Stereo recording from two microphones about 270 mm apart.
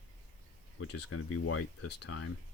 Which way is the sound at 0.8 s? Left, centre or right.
Left.